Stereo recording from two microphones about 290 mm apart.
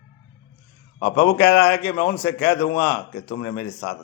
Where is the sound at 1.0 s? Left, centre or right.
Left.